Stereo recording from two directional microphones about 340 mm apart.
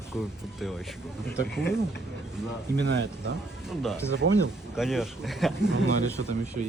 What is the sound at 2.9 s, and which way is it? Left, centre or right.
Speech, right.